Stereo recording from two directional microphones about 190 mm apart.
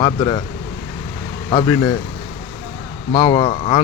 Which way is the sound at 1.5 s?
20° left (ahead or behind).